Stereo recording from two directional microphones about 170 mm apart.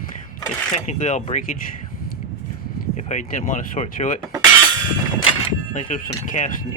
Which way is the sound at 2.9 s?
45° left (ahead or behind).